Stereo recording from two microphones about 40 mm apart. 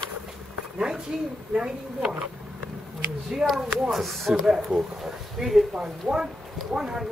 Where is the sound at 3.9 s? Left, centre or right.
Centre.